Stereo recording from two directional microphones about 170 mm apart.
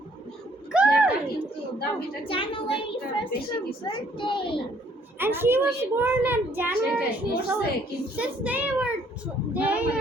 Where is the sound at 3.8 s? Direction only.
30° left (ahead or behind).